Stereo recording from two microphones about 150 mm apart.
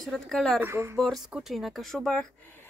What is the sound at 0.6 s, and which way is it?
Speech, 15° right (ahead or behind).